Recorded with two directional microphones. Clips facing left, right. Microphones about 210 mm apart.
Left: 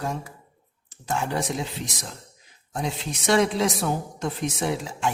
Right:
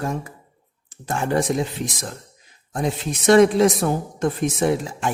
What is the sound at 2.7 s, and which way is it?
A woman's voice, 50° right (ahead or behind).